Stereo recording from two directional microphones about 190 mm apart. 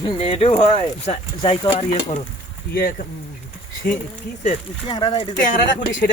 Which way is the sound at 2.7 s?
50° left (ahead or behind).